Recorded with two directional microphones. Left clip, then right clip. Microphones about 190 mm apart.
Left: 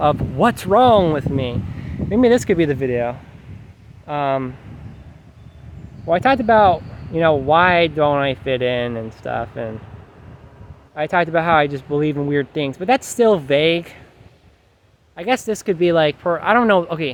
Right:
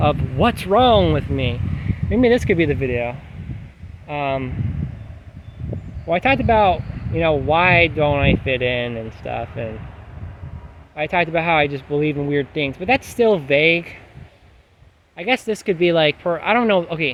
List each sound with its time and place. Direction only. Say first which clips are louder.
0.0 s speech: left 2 dB; 20° left (ahead or behind)
4.0 s speech: left 3 dB; 25° left (ahead or behind)
6.1 s speech: left 2 dB; 25° left (ahead or behind)
10.9 s speech: left 2 dB; 25° left (ahead or behind)
15.1 s speech: even; 20° left (ahead or behind)